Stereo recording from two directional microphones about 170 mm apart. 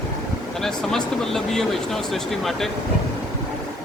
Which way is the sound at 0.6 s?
Centre (ahead or behind).